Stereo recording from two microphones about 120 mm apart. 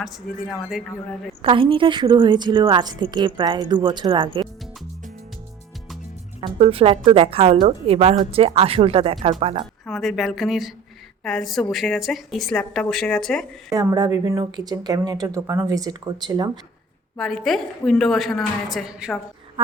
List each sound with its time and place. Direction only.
0.3 s a woman's voice: centre (ahead or behind)
1.4 s a woman's voice: 45° right (ahead or behind)
6.4 s a woman's voice: 50° right (ahead or behind)
9.8 s a woman's voice: centre (ahead or behind)
13.9 s a woman's voice: 30° right (ahead or behind)
17.2 s a woman's voice: 5° left (ahead or behind)
19.6 s insect: 45° right (ahead or behind)